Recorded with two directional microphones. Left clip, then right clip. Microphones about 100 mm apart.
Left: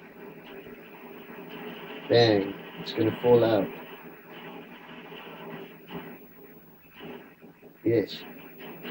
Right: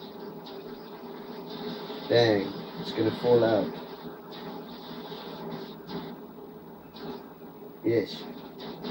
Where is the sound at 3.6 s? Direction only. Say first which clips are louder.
Right 2 dB; 30° right (ahead or behind).